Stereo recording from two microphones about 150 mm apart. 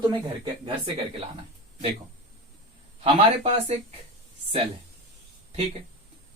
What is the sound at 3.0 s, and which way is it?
Speech, 45° right (ahead or behind).